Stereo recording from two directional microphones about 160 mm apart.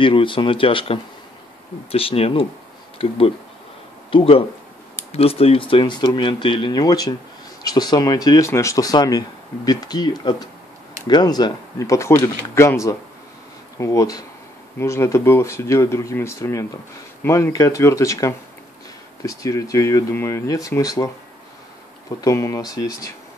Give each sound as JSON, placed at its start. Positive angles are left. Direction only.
{"t": 0.0, "sound": "speech", "side_deg": 30}
{"t": 22.2, "sound": "speech", "side_deg": 20}